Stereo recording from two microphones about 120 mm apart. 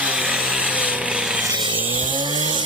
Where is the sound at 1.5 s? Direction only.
40° right (ahead or behind).